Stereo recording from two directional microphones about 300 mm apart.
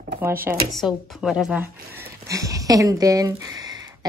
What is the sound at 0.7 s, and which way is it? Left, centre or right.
Speech, centre.